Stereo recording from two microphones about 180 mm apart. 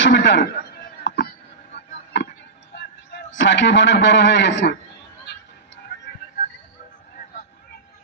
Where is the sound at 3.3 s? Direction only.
90° left.